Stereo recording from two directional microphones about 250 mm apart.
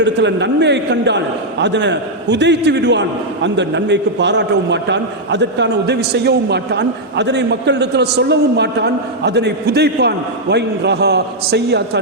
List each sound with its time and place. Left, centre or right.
0.0 s a man's voice: right